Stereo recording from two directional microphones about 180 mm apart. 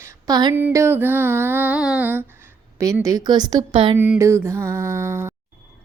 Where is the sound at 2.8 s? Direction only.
20° right (ahead or behind).